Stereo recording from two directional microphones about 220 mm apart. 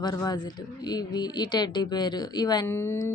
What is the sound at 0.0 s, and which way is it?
Speech, 15° left (ahead or behind).